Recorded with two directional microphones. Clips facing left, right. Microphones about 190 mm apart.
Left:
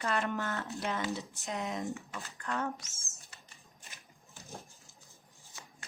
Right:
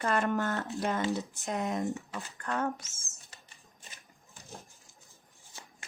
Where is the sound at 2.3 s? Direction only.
45° right (ahead or behind).